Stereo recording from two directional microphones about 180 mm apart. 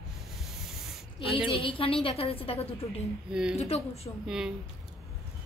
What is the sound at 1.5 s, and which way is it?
A woman's voice, 30° left (ahead or behind).